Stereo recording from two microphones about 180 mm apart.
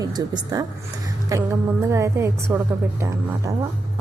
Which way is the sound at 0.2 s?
20° right (ahead or behind).